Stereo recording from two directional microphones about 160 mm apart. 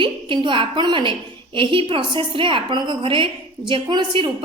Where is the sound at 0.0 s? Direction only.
30° right (ahead or behind).